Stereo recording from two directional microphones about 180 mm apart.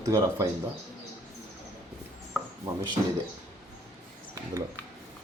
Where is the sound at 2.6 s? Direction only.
20° right (ahead or behind).